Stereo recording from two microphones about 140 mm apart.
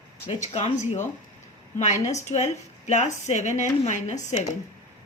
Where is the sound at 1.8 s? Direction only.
55° left (ahead or behind).